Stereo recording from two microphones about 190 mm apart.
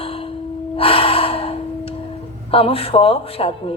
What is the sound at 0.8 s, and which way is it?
Gasp, 30° left (ahead or behind).